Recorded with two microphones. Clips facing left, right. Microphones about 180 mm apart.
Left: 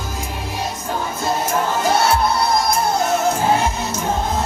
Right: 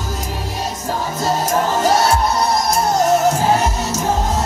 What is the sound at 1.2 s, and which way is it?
Music, 40° right (ahead or behind).